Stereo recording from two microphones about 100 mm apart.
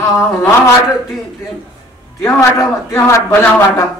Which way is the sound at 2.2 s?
25° left (ahead or behind).